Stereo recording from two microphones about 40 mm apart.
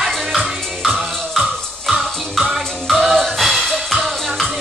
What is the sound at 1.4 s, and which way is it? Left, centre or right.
Music, centre.